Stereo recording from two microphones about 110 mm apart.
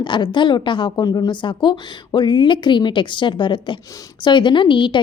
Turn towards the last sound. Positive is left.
turn(degrees=50)  # may be behind; listen again after turning